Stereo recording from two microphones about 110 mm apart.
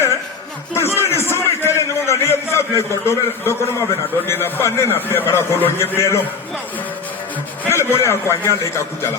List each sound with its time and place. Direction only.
0.8 s a sound: 25° left (ahead or behind)
4.3 s a man's voice: 20° left (ahead or behind)
7.7 s a man's voice: 25° left (ahead or behind)